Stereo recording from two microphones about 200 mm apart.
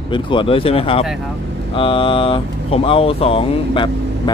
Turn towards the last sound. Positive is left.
turn(degrees=25)  # may be behind; listen again after turning